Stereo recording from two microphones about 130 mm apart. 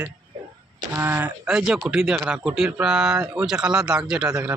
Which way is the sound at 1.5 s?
5° right (ahead or behind).